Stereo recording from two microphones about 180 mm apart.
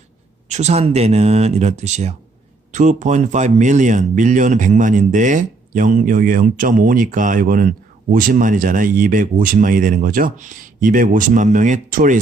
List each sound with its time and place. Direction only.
0.4 s speech: 40° right (ahead or behind)